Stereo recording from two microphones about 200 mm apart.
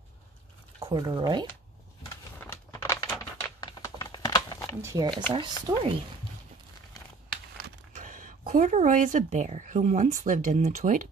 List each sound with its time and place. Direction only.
0.7 s speech: 25° right (ahead or behind)
2.4 s a sound: 10° left (ahead or behind)
3.6 s typing: 20° left (ahead or behind)
4.8 s speech: 15° right (ahead or behind)
7.9 s speech: 40° right (ahead or behind)